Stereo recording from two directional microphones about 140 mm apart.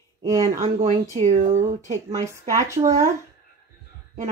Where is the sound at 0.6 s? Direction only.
45° right (ahead or behind).